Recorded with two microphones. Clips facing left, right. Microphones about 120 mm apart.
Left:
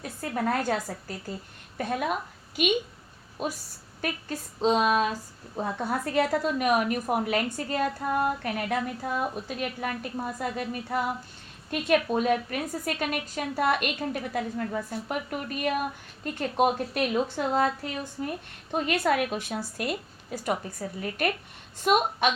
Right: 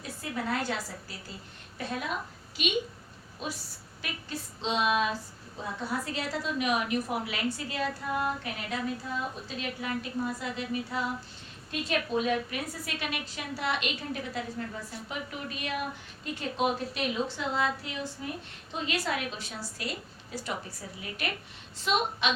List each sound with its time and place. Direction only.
0.2 s a woman's voice: 45° left (ahead or behind)